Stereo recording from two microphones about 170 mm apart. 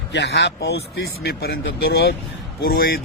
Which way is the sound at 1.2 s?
65° left (ahead or behind).